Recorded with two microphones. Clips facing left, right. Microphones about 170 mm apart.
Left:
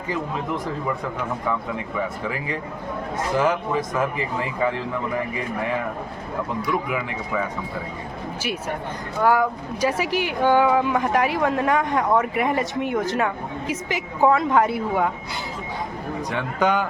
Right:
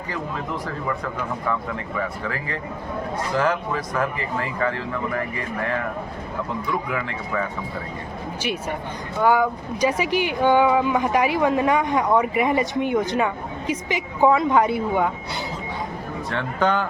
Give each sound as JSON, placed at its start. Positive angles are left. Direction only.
{"t": 1.5, "sound": "speech", "side_deg": 15}
{"t": 9.2, "sound": "speech", "side_deg": 0}
{"t": 16.3, "sound": "speech", "side_deg": 10}